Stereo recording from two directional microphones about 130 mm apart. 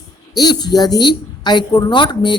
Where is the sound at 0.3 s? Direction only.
30° left (ahead or behind).